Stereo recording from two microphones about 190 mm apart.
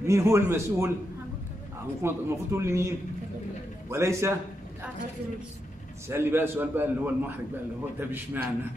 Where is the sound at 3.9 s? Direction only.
15° right (ahead or behind).